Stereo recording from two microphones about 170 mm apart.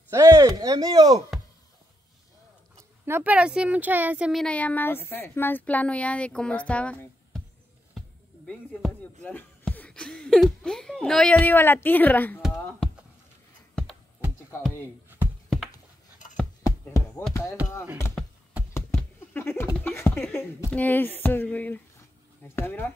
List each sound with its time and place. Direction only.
0.1 s speech: 20° right (ahead or behind)
3.1 s speech: 10° right (ahead or behind); by 7.4 s 10° left (ahead or behind)
8.5 s speech: 5° left (ahead or behind)
12.4 s a sound: 5° right (ahead or behind)
16.8 s a sound: 10° left (ahead or behind)
18.7 s typing: 15° left (ahead or behind)
19.8 s speech: 10° left (ahead or behind)